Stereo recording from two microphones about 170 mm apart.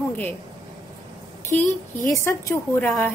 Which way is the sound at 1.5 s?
10° left (ahead or behind).